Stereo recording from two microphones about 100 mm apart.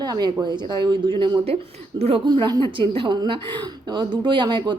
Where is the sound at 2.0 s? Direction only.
80° right.